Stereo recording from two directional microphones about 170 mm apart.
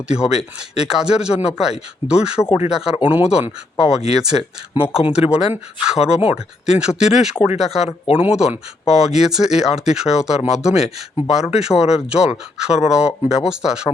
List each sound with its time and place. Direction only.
0.2 s speech: 5° right (ahead or behind)
7.9 s speech: 35° left (ahead or behind)
8.2 s speech: 5° right (ahead or behind)